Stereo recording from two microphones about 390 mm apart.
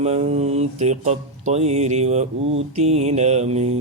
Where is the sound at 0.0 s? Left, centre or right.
Centre.